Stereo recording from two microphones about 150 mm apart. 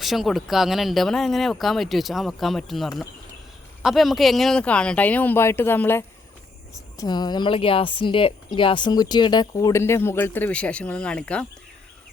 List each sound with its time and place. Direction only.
0.0 s speech: centre (ahead or behind)
6.9 s speech: 25° left (ahead or behind); by 11.4 s 5° left (ahead or behind)